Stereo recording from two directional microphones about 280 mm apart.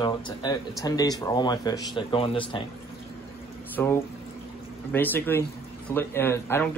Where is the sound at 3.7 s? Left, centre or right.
Centre.